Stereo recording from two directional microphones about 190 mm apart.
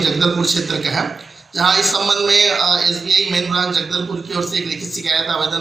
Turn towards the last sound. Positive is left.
turn(degrees=0)  # may be behind; listen again after turning